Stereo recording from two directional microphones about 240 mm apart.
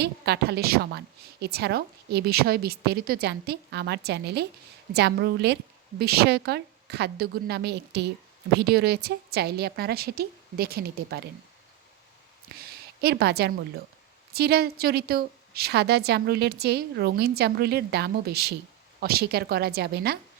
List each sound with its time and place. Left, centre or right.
0.0 s a woman's voice: right
12.5 s a sound: right
14.3 s a woman's voice: right